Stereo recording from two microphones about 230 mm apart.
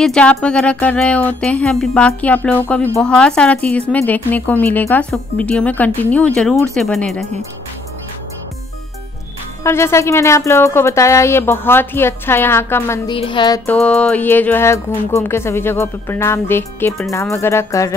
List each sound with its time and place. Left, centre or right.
0.0 s speech: centre
9.6 s speech: centre
13.1 s music: left
13.7 s speech: centre